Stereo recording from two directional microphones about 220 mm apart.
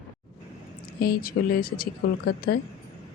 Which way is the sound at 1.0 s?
45° left (ahead or behind).